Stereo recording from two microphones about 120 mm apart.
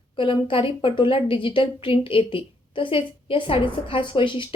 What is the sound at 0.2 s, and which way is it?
A woman's voice, 45° left (ahead or behind).